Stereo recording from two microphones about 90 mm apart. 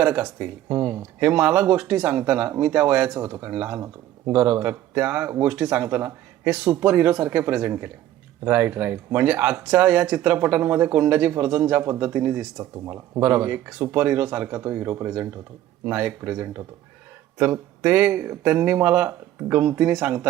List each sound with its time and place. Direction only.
0.0 s speech: 20° right (ahead or behind)
0.7 s speech: 25° right (ahead or behind)
3.2 s speech: 25° right (ahead or behind)